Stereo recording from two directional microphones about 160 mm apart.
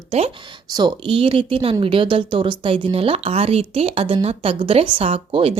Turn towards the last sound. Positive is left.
turn(degrees=-35)  # may be behind; listen again after turning